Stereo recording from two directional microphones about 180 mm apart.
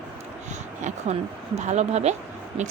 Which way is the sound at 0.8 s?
40° right (ahead or behind).